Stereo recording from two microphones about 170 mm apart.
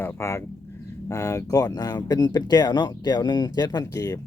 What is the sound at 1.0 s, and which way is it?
Speech, 15° left (ahead or behind).